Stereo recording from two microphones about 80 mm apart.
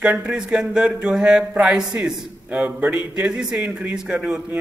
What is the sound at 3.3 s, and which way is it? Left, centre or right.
A man's voice, centre.